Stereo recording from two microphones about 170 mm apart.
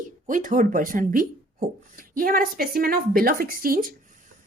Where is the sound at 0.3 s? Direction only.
50° right (ahead or behind).